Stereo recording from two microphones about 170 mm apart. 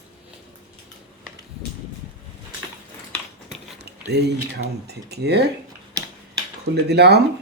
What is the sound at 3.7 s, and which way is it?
Speech, 75° right (ahead or behind).